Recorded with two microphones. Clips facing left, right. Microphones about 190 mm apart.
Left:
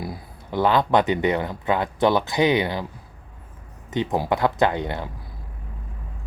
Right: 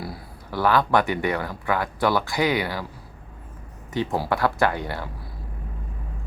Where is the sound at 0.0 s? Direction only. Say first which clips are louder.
Left 2 dB; 20° left (ahead or behind).